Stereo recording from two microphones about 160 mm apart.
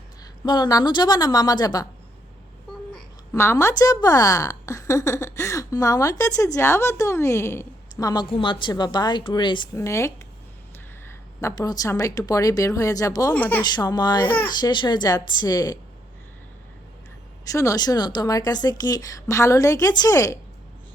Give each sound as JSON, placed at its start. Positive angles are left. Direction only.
{"t": 0.4, "sound": "a woman's voice", "side_deg": 25}
{"t": 3.3, "sound": "a woman's voice", "side_deg": 15}
{"t": 9.7, "sound": "speech", "side_deg": 15}
{"t": 11.3, "sound": "a woman's voice", "side_deg": 20}
{"t": 13.3, "sound": "speech", "side_deg": 10}
{"t": 13.6, "sound": "a woman's voice", "side_deg": 25}
{"t": 14.3, "sound": "speech", "side_deg": 10}
{"t": 14.6, "sound": "a woman's voice", "side_deg": 30}
{"t": 17.4, "sound": "a woman's voice", "side_deg": 20}